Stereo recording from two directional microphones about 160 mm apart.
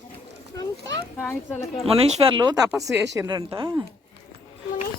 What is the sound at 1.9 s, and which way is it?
Speech, 30° right (ahead or behind).